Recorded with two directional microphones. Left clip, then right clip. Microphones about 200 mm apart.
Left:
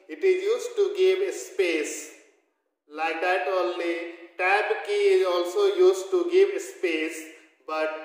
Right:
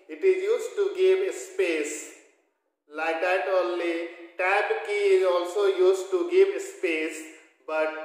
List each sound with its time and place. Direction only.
0.2 s a man's voice: 15° left (ahead or behind)
2.9 s a man's voice: 15° left (ahead or behind)